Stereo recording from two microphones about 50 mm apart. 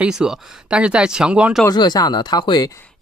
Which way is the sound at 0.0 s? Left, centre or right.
Centre.